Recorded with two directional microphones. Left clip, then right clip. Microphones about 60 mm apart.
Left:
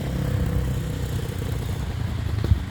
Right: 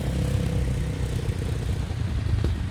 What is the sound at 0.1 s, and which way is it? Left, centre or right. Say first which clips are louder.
Vehicle: left 1 dB; left.